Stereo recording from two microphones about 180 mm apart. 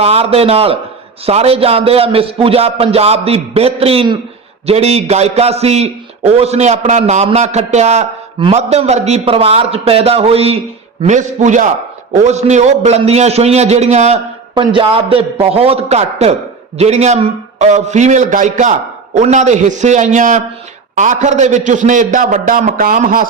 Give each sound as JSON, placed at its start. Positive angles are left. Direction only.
{"t": 0.0, "sound": "a man's voice", "side_deg": -35}
{"t": 14.5, "sound": "a man's voice", "side_deg": -30}